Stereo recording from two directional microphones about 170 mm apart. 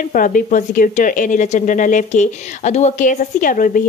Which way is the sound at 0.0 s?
50° left (ahead or behind).